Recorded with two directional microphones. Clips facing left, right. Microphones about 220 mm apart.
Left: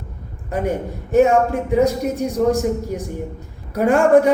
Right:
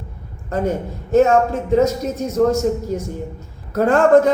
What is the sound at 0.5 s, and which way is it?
A man's voice, 15° left (ahead or behind).